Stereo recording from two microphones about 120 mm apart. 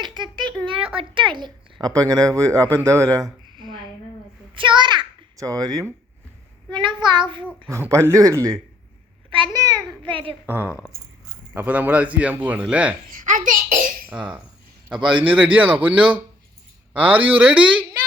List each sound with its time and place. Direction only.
0.0 s a sound: 40° right (ahead or behind)
1.9 s speech: 30° right (ahead or behind)
4.5 s a sound: 40° right (ahead or behind)
5.4 s speech: 30° right (ahead or behind)
6.7 s a child's voice: 40° right (ahead or behind)
7.7 s speech: 25° right (ahead or behind)
9.3 s a child's voice: 40° right (ahead or behind)
10.4 s speech: 15° right (ahead or behind)
13.1 s a child's voice: 90° right
14.1 s a man's voice: 10° right (ahead or behind)